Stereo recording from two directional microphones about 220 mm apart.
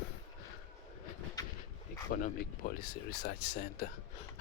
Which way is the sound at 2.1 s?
40° left (ahead or behind).